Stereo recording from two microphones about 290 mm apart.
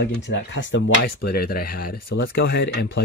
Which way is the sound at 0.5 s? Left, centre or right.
Left.